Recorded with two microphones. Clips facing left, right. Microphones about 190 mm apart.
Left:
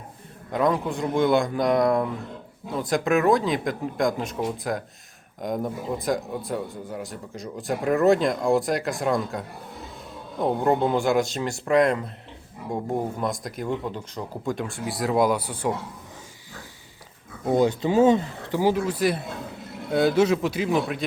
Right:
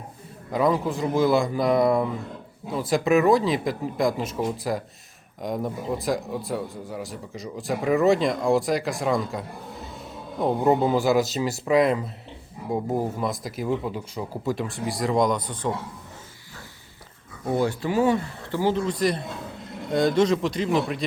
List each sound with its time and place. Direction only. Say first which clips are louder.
0.5 s speech: right 1 dB; centre (ahead or behind)
10.4 s speech: right 1 dB; 5° right (ahead or behind)
17.4 s speech: left 3 dB; 20° left (ahead or behind); by 21.0 s centre (ahead or behind)